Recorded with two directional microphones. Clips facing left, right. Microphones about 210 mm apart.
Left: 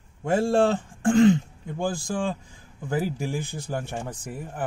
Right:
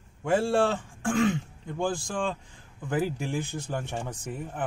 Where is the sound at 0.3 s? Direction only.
15° left (ahead or behind).